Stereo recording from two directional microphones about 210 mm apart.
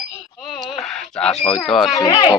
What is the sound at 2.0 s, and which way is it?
Speech, 20° left (ahead or behind).